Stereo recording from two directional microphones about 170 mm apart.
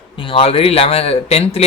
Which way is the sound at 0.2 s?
30° left (ahead or behind).